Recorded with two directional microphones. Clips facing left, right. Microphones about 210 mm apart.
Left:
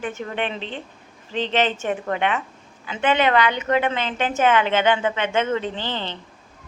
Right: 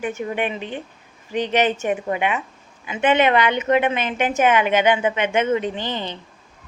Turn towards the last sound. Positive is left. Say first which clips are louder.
# right 2 dB
turn(degrees=-15)  # may be behind; listen again after turning